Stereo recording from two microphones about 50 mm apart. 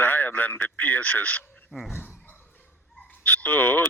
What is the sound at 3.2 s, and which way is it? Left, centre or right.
Speech, left.